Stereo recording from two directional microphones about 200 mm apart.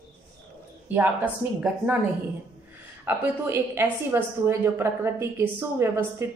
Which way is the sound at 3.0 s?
10° right (ahead or behind).